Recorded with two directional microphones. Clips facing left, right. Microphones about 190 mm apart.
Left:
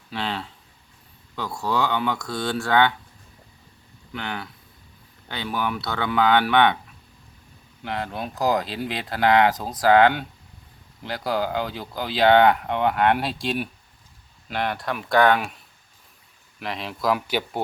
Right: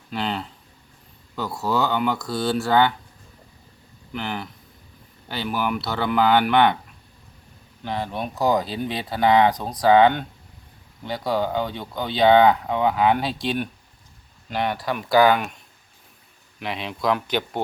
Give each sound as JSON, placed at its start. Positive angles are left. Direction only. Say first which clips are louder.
{"t": 0.1, "sound": "speech", "louder": "right 2 dB", "side_deg": 0}
{"t": 4.1, "sound": "speech", "louder": "right 2 dB", "side_deg": 0}
{"t": 7.9, "sound": "speech", "louder": "right 2 dB", "side_deg": 0}